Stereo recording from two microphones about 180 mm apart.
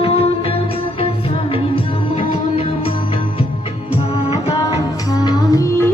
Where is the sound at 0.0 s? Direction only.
30° left (ahead or behind).